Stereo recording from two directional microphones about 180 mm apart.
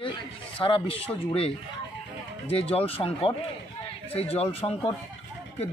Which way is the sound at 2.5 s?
30° left (ahead or behind).